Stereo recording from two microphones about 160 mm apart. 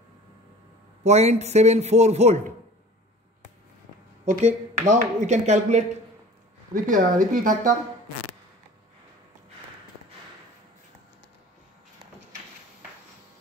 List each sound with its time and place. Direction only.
1.0 s speech: 45° right (ahead or behind)
4.3 s speech: 50° right (ahead or behind)